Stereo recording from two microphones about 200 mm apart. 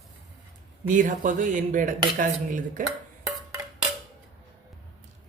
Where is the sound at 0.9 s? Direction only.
40° right (ahead or behind).